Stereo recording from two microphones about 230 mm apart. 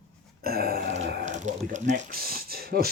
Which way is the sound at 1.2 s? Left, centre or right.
Right.